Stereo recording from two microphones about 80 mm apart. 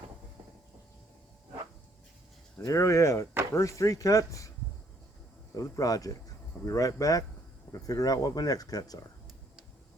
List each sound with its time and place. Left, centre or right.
2.6 s speech: left
5.5 s speech: left